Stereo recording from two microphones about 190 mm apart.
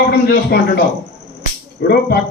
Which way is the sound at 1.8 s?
55° left (ahead or behind).